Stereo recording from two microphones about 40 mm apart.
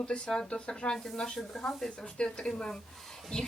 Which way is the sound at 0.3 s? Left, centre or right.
Centre.